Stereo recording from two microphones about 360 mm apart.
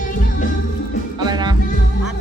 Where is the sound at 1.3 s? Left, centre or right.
Centre.